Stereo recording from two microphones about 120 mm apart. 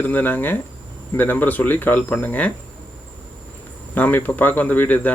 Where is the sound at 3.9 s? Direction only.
15° left (ahead or behind).